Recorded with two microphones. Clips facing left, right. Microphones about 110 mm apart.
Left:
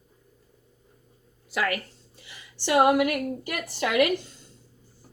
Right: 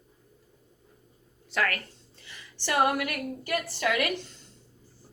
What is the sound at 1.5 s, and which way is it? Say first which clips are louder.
Speech: left 2 dB; 5° left (ahead or behind).